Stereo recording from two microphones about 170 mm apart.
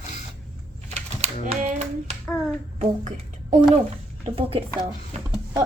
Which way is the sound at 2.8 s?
45° right (ahead or behind).